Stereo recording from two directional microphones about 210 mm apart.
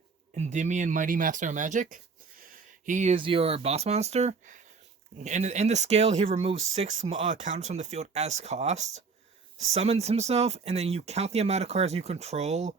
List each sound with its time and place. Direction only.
0.3 s speech: 35° right (ahead or behind)